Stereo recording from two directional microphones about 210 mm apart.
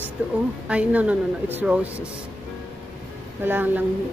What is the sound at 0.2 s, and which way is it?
A woman's voice, 5° right (ahead or behind).